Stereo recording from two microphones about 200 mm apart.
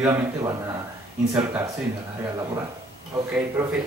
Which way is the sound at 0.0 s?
15° right (ahead or behind).